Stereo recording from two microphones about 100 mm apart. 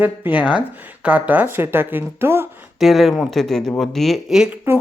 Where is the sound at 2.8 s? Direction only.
Centre (ahead or behind).